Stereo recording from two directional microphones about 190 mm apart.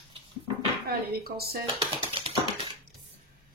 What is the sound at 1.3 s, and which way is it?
Speech, 55° right (ahead or behind).